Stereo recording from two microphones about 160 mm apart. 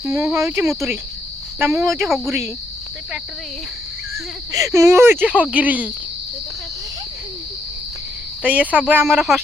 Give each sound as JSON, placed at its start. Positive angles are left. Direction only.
{"t": 0.0, "sound": "speech", "side_deg": -15}
{"t": 2.0, "sound": "speech", "side_deg": 0}
{"t": 4.5, "sound": "speech", "side_deg": -20}
{"t": 8.4, "sound": "speech", "side_deg": -10}
{"t": 9.1, "sound": "speech", "side_deg": 0}